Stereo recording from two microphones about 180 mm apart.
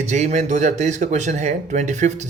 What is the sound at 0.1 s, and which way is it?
Speech, 40° right (ahead or behind).